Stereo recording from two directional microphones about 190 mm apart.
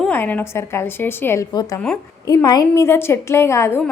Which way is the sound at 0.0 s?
10° left (ahead or behind).